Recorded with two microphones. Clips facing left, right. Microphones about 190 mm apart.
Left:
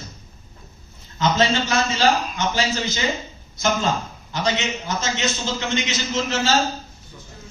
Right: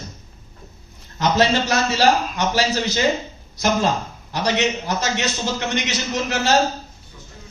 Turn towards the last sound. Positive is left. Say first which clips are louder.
# right 1 dB
turn(degrees=-65)  # may be behind; listen again after turning